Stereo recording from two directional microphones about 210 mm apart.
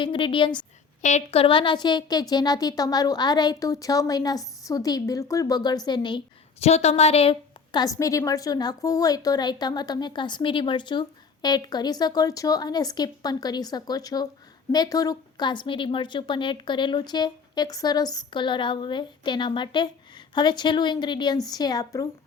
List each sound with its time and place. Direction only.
0.0 s a woman's voice: 25° left (ahead or behind)